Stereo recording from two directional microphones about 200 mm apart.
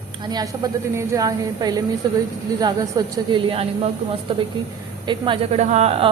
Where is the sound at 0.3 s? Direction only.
20° right (ahead or behind).